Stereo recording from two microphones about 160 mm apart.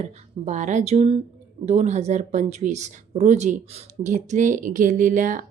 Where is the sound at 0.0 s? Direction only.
45° right (ahead or behind).